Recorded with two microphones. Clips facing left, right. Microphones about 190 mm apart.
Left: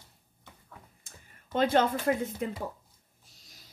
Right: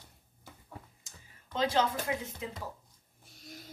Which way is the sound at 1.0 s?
55° left (ahead or behind).